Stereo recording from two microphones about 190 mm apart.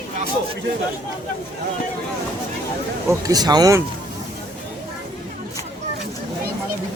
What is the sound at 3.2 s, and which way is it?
Speech, 20° right (ahead or behind).